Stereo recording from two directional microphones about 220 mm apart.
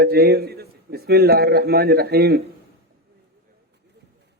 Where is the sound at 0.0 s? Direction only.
45° right (ahead or behind).